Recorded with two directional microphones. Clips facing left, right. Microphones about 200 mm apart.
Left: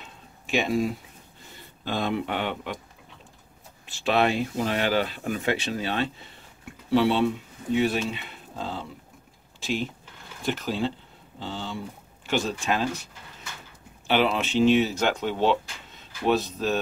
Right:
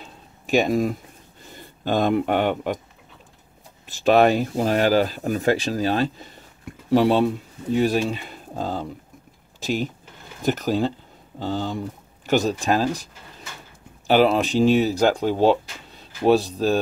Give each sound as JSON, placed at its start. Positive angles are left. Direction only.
{"t": 0.0, "sound": "a sound", "side_deg": -40}
{"t": 1.9, "sound": "speech", "side_deg": -45}
{"t": 3.8, "sound": "speech", "side_deg": -40}
{"t": 9.6, "sound": "a sound", "side_deg": -40}
{"t": 10.4, "sound": "speech", "side_deg": -40}
{"t": 14.0, "sound": "speech", "side_deg": -40}